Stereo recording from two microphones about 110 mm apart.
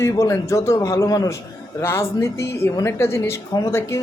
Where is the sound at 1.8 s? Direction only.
20° left (ahead or behind).